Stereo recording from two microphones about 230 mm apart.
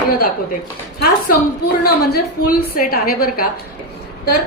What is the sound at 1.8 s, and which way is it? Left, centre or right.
A woman's voice, left.